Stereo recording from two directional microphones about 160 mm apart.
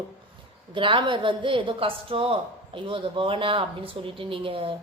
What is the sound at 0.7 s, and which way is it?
A woman's voice, 30° right (ahead or behind).